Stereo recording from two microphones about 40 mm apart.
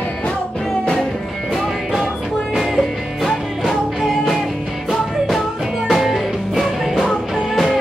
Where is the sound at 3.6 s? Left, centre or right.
Centre.